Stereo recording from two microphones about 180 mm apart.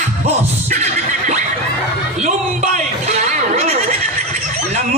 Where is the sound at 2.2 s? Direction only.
40° right (ahead or behind).